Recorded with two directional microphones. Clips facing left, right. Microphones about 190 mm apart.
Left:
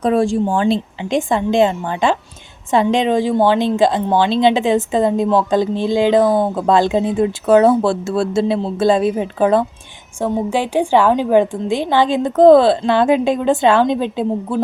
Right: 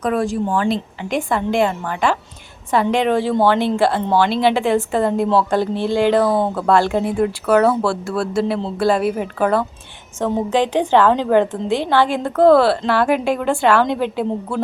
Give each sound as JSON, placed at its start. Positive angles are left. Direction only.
{"t": 0.0, "sound": "a woman's voice", "side_deg": 30}
{"t": 6.2, "sound": "speech", "side_deg": 0}
{"t": 6.5, "sound": "a woman's voice", "side_deg": 15}
{"t": 10.5, "sound": "a woman's voice", "side_deg": 10}